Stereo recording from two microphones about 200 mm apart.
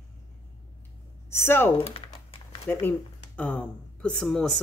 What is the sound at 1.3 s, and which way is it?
Speech, 10° left (ahead or behind).